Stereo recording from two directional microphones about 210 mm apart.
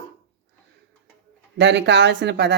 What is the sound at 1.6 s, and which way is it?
Speech, 55° right (ahead or behind).